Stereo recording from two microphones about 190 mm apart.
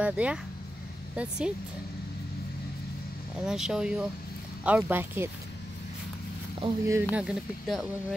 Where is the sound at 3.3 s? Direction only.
5° right (ahead or behind).